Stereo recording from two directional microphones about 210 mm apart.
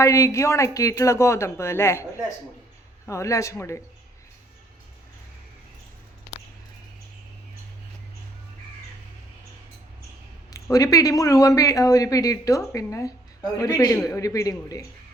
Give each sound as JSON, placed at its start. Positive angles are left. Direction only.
{"t": 0.0, "sound": "speech", "side_deg": 15}
{"t": 10.5, "sound": "speech", "side_deg": 15}